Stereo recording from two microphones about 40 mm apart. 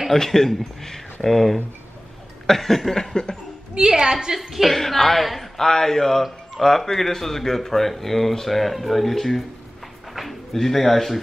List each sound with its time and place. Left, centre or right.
0.1 s speech: centre
3.7 s a woman's voice: centre
4.4 s speech: centre
4.6 s speech: centre
5.6 s speech: centre